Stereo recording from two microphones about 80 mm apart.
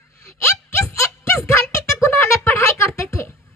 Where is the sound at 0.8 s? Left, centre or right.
Left.